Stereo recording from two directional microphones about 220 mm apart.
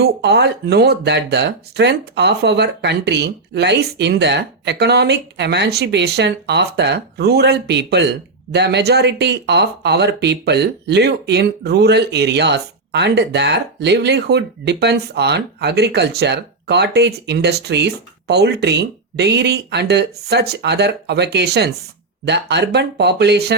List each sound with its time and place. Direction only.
0.0 s speech: 50° right (ahead or behind)